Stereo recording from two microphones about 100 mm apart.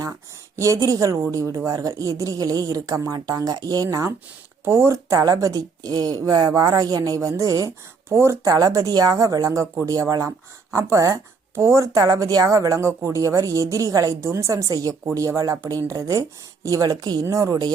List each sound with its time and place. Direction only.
0.5 s a woman's voice: 30° right (ahead or behind)